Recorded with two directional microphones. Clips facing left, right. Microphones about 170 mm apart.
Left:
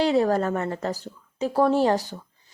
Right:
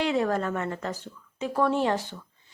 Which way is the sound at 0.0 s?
35° left (ahead or behind).